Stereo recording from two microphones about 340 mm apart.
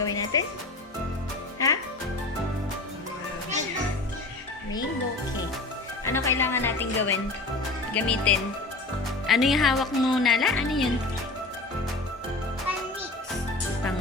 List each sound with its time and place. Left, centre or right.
0.0 s music: centre
1.5 s music: centre
6.1 s speech: centre